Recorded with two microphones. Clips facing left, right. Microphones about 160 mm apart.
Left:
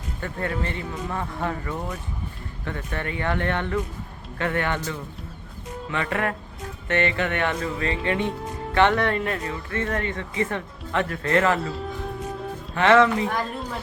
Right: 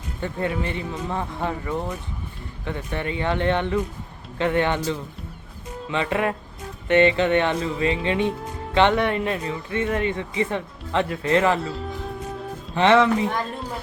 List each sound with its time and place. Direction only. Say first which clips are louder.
0.2 s speech: right 3 dB; 15° right (ahead or behind)
5.9 s speech: right 3 dB; 20° right (ahead or behind)
12.7 s speech: even; 20° right (ahead or behind)